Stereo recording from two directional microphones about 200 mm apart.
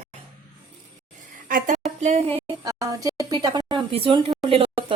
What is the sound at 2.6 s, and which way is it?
Speech, 15° right (ahead or behind).